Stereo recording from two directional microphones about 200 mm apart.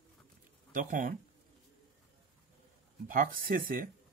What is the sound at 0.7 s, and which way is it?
Speech, 40° right (ahead or behind).